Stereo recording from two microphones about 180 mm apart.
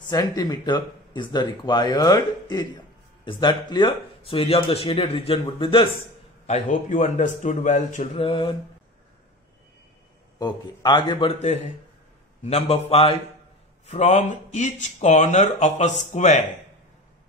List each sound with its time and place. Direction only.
0.1 s speech: 20° left (ahead or behind)
6.4 s speech: 45° left (ahead or behind)
10.4 s speech: 25° left (ahead or behind)
12.4 s speech: 35° left (ahead or behind)